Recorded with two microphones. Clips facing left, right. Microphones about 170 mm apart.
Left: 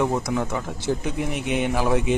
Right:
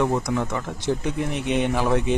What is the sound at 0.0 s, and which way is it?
Speech, 5° left (ahead or behind).